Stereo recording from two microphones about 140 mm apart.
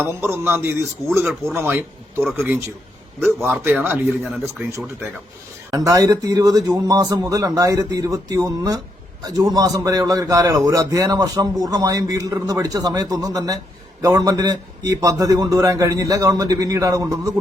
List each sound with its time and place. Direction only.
0.0 s speech: 15° right (ahead or behind)
3.6 s speech: 15° right (ahead or behind)
5.7 s a man's voice: 25° right (ahead or behind)